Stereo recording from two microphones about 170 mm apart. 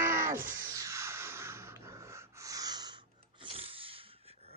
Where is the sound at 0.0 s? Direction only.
15° right (ahead or behind).